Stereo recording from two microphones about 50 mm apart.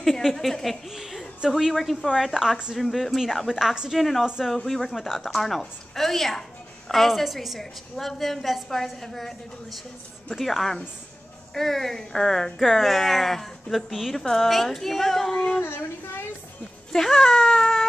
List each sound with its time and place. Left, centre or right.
0.0 s a woman's voice: centre
15.6 s speech: left
16.9 s speech: centre